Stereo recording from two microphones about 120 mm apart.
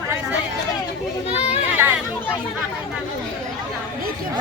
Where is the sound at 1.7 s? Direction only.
15° right (ahead or behind).